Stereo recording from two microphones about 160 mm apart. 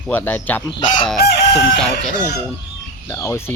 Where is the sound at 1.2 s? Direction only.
90° left.